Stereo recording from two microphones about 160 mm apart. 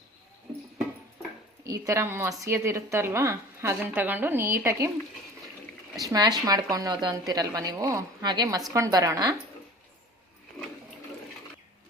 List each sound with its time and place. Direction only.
1.6 s a woman's voice: 20° right (ahead or behind)
6.0 s a woman's voice: 25° right (ahead or behind)